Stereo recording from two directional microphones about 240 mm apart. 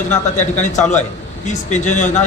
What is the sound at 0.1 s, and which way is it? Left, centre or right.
Speech, left.